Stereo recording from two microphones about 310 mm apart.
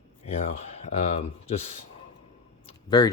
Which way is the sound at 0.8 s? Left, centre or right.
Left.